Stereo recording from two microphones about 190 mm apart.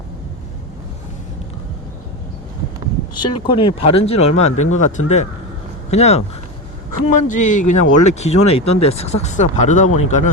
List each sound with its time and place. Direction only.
3.2 s speech: 25° left (ahead or behind)
7.3 s speech: 40° left (ahead or behind)